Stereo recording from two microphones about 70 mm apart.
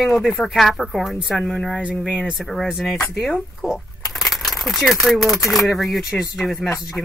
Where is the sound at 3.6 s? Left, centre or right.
Centre.